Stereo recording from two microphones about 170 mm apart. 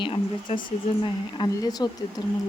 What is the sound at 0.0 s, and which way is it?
Speech, 30° left (ahead or behind).